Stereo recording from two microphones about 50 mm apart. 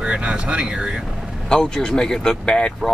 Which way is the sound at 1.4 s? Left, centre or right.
Centre.